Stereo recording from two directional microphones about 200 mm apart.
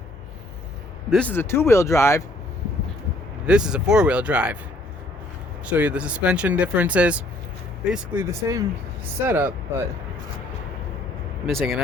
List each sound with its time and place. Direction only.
1.1 s speech: 10° left (ahead or behind)
3.4 s speech: 5° right (ahead or behind)
5.6 s speech: 5° right (ahead or behind)
11.4 s speech: centre (ahead or behind)